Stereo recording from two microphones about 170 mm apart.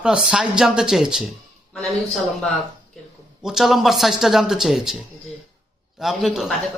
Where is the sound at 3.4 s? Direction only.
Centre (ahead or behind).